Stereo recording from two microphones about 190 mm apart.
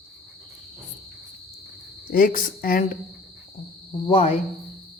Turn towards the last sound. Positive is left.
turn(degrees=30)  # may be behind; listen again after turning